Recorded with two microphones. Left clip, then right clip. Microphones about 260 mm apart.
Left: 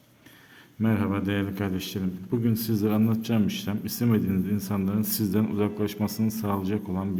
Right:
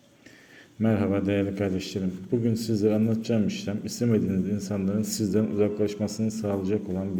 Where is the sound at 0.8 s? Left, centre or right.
Centre.